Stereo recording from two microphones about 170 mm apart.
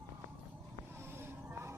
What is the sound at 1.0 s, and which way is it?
Music, 15° right (ahead or behind).